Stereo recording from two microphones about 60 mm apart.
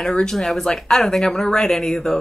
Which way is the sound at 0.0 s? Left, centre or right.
Centre.